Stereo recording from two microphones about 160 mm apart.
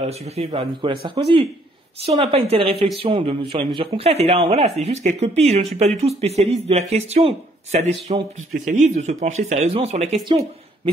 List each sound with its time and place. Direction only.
0.0 s speech: 40° right (ahead or behind)
0.5 s speech: 30° right (ahead or behind)
8.5 s speech: 50° right (ahead or behind)